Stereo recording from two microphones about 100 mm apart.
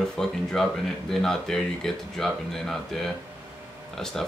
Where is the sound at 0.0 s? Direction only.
5° left (ahead or behind).